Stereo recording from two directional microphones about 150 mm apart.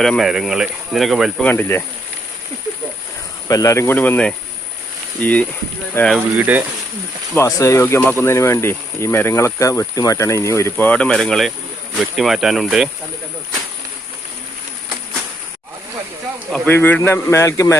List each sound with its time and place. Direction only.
0.0 s speech: centre (ahead or behind)
3.5 s speech: 20° left (ahead or behind)
6.1 s speech: 10° right (ahead or behind)
7.3 s speech: 20° left (ahead or behind); by 12.9 s centre (ahead or behind)
16.5 s speech: 10° left (ahead or behind)